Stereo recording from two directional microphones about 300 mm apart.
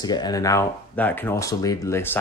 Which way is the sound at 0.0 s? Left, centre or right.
Centre.